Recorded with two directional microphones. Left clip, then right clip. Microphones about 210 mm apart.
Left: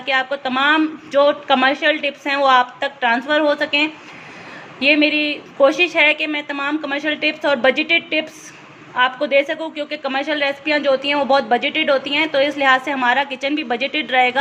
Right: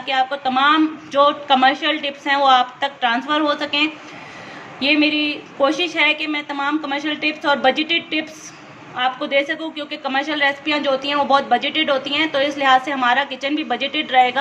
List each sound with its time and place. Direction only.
0.0 s a woman's voice: 25° left (ahead or behind)